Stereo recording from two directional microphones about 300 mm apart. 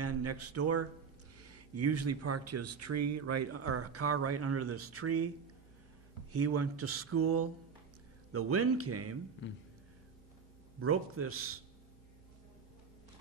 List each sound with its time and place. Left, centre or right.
0.0 s speech: right
6.3 s speech: right
10.8 s speech: right